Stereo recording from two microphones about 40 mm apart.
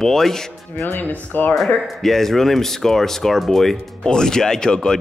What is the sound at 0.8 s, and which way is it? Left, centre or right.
Speech, left.